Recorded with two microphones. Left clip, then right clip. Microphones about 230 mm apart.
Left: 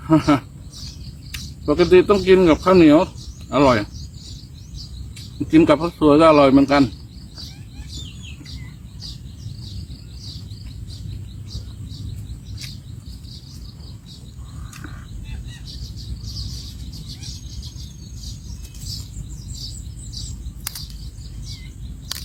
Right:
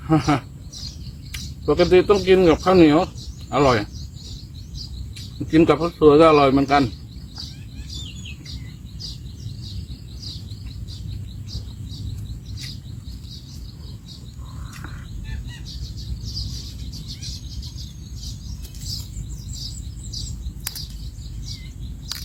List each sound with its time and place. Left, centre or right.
0.1 s speech: centre
5.5 s speech: centre